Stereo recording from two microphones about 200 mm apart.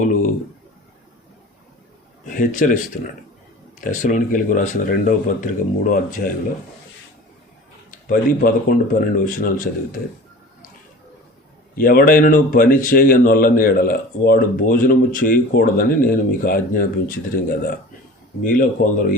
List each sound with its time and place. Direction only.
0.0 s a sound: 40° left (ahead or behind)
2.2 s a man's voice: 40° left (ahead or behind)
7.9 s speech: 45° left (ahead or behind)
11.7 s speech: 45° left (ahead or behind)
18.4 s speech: 45° left (ahead or behind)